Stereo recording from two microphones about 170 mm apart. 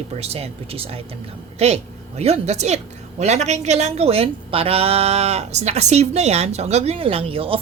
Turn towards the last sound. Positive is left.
turn(degrees=-35)  # may be behind; listen again after turning